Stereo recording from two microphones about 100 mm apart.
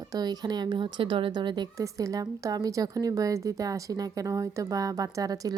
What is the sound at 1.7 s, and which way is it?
A woman's voice, 35° right (ahead or behind).